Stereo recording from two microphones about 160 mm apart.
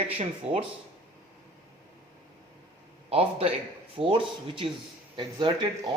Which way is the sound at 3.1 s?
40° right (ahead or behind).